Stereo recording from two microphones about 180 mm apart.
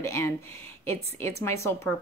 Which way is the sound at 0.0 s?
15° left (ahead or behind).